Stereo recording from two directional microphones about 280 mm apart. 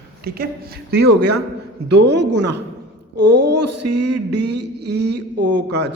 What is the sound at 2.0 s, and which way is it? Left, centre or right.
Speech, right.